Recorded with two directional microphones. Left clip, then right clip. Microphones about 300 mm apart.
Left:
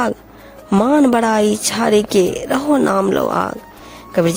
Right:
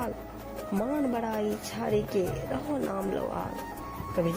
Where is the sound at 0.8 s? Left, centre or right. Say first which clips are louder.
Left 17 dB; left.